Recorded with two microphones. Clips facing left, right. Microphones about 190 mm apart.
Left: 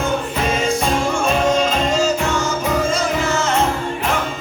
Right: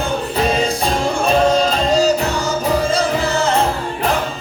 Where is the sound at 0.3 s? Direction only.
35° right (ahead or behind).